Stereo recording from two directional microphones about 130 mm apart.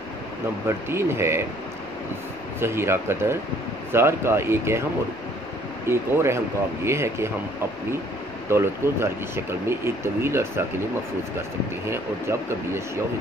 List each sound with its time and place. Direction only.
0.7 s speech: 20° right (ahead or behind)
2.6 s speech: 20° right (ahead or behind)
5.9 s speech: 20° right (ahead or behind)
8.5 s speech: 20° right (ahead or behind)
11.9 s speech: 20° right (ahead or behind)